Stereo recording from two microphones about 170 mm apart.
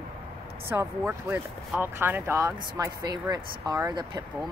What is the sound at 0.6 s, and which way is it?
Speech, 10° right (ahead or behind).